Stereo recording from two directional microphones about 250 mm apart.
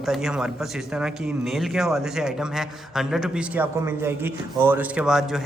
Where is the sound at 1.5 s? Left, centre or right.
Centre.